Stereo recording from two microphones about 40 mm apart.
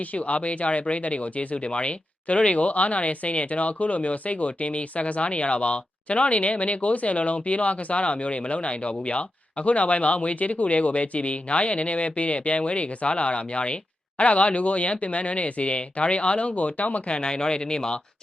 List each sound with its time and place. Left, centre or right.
0.1 s speech: left; by 18.0 s centre